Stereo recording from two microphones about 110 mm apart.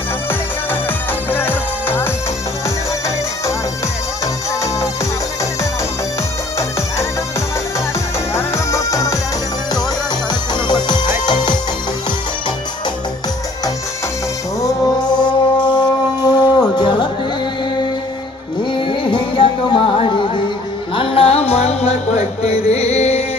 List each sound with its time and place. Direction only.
1.3 s music: 15° left (ahead or behind)
8.3 s music: 25° left (ahead or behind)
10.8 s music: 40° left (ahead or behind)
14.6 s music: 30° left (ahead or behind)
15.6 s a sound: 40° left (ahead or behind)
16.7 s music: 40° left (ahead or behind)
18.7 s music: 45° left (ahead or behind); by 23.2 s 75° left (ahead or behind)